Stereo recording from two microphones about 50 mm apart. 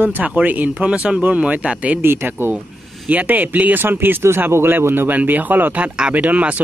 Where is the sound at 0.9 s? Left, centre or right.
Right.